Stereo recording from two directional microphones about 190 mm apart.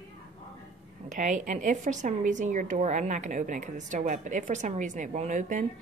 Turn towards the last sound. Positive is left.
turn(degrees=-40)  # may be behind; listen again after turning